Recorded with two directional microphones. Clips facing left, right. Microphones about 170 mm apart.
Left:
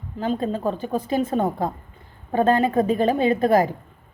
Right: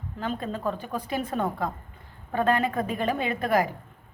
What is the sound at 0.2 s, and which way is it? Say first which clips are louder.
A woman's voice: left 7 dB; 30° left (ahead or behind).